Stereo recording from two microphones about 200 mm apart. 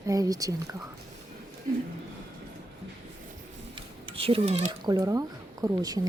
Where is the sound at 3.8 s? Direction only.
25° right (ahead or behind).